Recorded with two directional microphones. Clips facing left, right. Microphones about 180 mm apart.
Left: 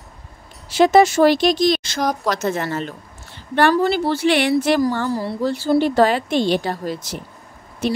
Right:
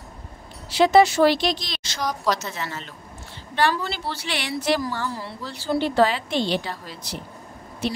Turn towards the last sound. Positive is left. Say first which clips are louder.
# left 6 dB
turn(degrees=45)  # may be behind; listen again after turning